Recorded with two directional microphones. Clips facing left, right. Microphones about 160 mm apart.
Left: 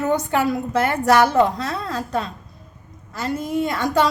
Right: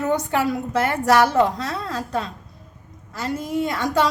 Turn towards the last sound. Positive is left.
turn(degrees=50)  # may be behind; listen again after turning